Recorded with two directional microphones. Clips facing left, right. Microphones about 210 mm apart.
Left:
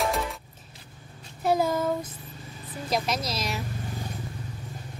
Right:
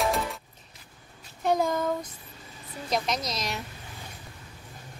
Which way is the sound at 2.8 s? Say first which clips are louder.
Left 1 dB; 5° left (ahead or behind).